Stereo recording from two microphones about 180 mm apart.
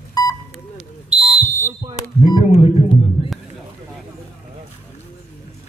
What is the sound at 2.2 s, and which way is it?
Single-lens reflex camera, 25° left (ahead or behind).